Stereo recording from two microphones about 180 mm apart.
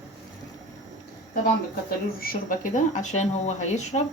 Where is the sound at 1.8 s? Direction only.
55° left (ahead or behind).